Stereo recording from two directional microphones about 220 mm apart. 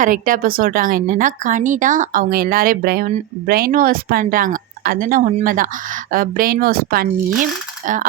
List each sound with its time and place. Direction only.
0.0 s speech: 40° right (ahead or behind)